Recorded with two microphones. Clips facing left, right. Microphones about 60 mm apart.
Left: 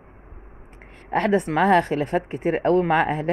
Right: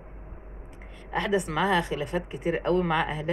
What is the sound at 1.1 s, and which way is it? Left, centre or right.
Speech, left.